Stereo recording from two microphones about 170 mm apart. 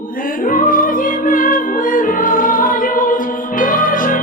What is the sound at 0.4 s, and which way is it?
Music, 55° left (ahead or behind).